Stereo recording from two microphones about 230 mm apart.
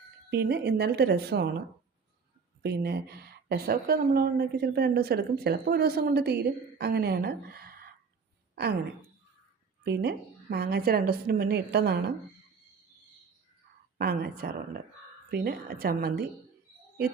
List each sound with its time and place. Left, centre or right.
0.3 s a woman's voice: right
2.6 s a woman's voice: right
9.8 s a woman's voice: right
14.0 s a woman's voice: right